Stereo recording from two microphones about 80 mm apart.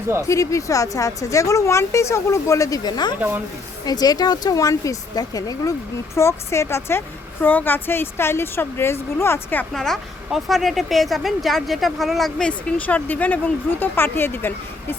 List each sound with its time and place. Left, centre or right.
0.3 s a woman's voice: left
2.8 s speech: left
6.1 s a woman's voice: left
9.7 s a woman's voice: centre
12.5 s speech: centre